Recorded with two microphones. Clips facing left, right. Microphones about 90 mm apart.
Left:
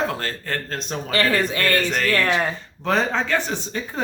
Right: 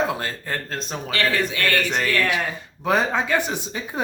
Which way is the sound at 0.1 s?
15° right (ahead or behind).